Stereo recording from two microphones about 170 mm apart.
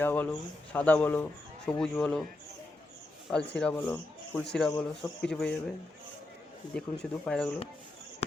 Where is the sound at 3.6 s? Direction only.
5° left (ahead or behind).